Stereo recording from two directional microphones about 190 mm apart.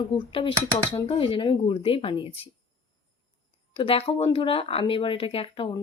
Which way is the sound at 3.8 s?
30° left (ahead or behind).